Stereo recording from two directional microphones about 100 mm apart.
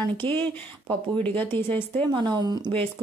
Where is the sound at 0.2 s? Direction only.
15° left (ahead or behind).